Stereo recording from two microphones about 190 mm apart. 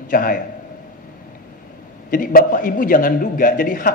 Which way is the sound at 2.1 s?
45° left (ahead or behind).